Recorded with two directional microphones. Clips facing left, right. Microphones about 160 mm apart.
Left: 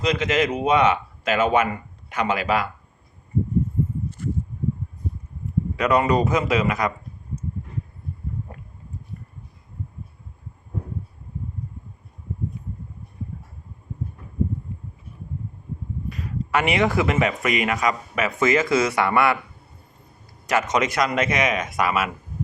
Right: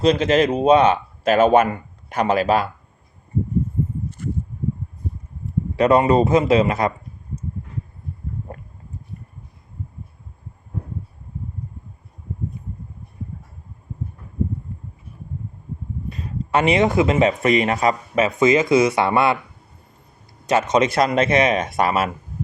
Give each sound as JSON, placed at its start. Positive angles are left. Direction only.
{"t": 0.0, "sound": "speech", "side_deg": -35}
{"t": 5.7, "sound": "speech", "side_deg": -30}
{"t": 16.0, "sound": "speech", "side_deg": -25}
{"t": 20.5, "sound": "speech", "side_deg": -25}